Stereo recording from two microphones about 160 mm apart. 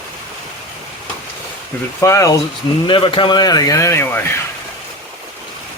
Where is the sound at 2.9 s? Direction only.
30° left (ahead or behind); by 4.4 s 15° left (ahead or behind).